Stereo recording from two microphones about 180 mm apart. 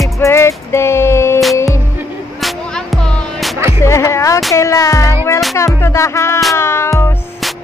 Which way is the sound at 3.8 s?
15° left (ahead or behind).